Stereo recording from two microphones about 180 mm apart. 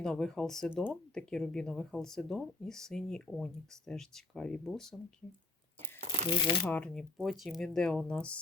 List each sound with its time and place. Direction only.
0.0 s speech: 5° left (ahead or behind)
6.2 s speech: 25° left (ahead or behind)
6.7 s speech: 5° left (ahead or behind)